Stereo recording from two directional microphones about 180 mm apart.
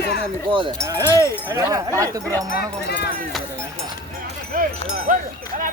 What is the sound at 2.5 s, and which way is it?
Speech, 65° left (ahead or behind).